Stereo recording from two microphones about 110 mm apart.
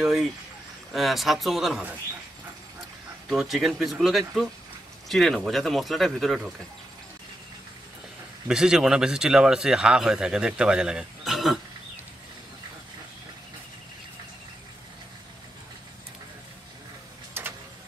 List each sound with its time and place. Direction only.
0.0 s speech: 5° right (ahead or behind)
3.3 s speech: centre (ahead or behind)
8.5 s speech: 5° right (ahead or behind)
17.3 s a sound: 20° right (ahead or behind)